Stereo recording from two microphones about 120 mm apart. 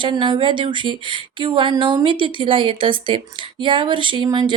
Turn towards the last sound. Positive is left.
turn(degrees=-40)  # may be behind; listen again after turning